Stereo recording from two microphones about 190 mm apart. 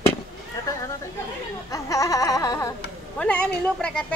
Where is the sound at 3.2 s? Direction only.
5° left (ahead or behind).